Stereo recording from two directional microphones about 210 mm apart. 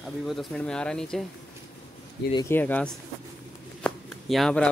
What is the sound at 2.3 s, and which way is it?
Speech, 10° left (ahead or behind).